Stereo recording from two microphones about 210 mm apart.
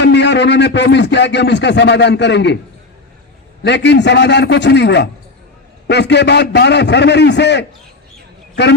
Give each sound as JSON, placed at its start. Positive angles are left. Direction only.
{"t": 0.0, "sound": "speech", "side_deg": 55}
{"t": 3.6, "sound": "speech", "side_deg": 55}